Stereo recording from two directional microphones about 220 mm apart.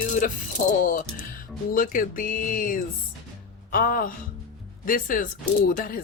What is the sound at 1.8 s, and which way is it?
Speech, 40° left (ahead or behind).